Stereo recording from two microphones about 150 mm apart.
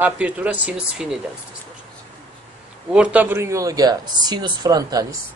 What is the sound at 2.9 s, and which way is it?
Speech, 5° right (ahead or behind).